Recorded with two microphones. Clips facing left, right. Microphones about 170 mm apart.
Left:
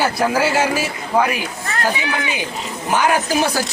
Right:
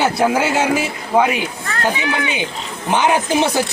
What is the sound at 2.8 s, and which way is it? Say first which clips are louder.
Speech: right 1 dB; 25° right (ahead or behind).